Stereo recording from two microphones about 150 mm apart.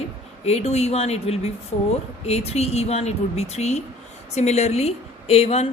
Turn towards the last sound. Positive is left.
turn(degrees=45)  # may be behind; listen again after turning